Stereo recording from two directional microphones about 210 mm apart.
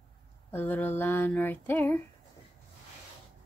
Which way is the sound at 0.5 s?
10° left (ahead or behind).